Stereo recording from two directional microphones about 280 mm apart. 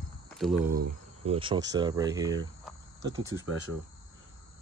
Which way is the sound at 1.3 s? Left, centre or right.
Centre.